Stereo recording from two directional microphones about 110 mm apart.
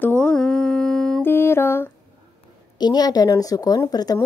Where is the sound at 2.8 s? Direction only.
35° left (ahead or behind).